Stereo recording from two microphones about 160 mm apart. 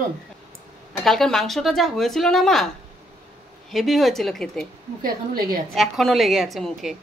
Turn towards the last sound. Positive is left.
turn(degrees=0)  # may be behind; listen again after turning